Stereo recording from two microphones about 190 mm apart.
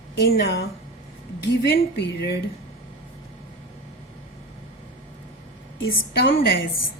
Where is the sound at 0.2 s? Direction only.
60° left (ahead or behind).